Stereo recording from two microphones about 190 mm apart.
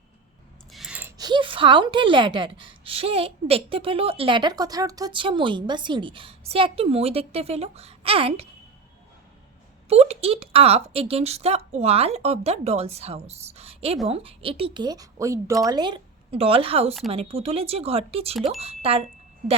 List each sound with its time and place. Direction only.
0.7 s a sound: 5° right (ahead or behind)
1.2 s a woman's voice: 25° right (ahead or behind)
9.9 s a woman's voice: 35° right (ahead or behind)